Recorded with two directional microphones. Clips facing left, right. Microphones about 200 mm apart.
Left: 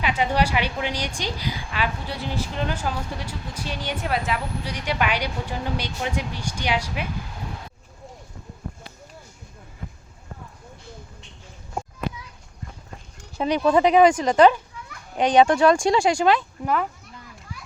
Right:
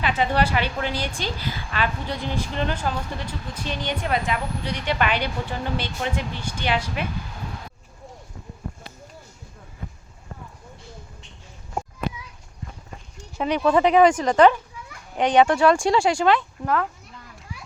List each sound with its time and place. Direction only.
0.0 s a woman's voice: 10° left (ahead or behind)
13.3 s speech: 35° left (ahead or behind)
13.6 s a woman's voice: 15° left (ahead or behind)
16.6 s a child's voice: centre (ahead or behind)